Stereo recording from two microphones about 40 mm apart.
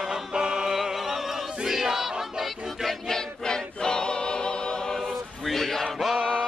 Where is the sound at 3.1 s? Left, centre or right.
Centre.